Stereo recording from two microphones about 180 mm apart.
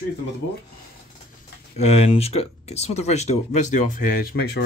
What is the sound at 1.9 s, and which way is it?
Speech, 35° left (ahead or behind).